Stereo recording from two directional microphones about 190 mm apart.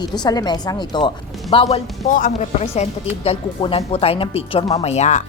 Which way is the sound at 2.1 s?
45° left (ahead or behind).